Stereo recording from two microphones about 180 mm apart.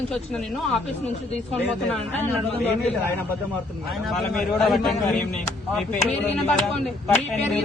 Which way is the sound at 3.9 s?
Centre (ahead or behind).